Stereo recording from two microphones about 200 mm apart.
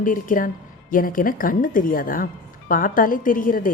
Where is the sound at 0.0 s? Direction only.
40° left (ahead or behind).